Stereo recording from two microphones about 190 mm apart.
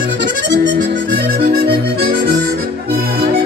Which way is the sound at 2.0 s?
55° right (ahead or behind).